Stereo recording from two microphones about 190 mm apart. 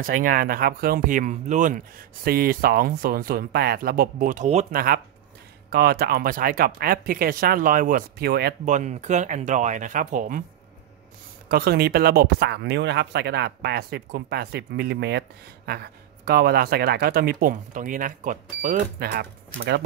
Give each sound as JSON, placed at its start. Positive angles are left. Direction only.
{"t": 0.0, "sound": "speech", "side_deg": -45}
{"t": 4.7, "sound": "speech", "side_deg": -50}
{"t": 8.6, "sound": "speech", "side_deg": -40}
{"t": 11.5, "sound": "speech", "side_deg": -55}
{"t": 19.1, "sound": "speech", "side_deg": -60}